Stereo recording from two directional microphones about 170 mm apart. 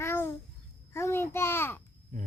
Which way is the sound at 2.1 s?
45° right (ahead or behind).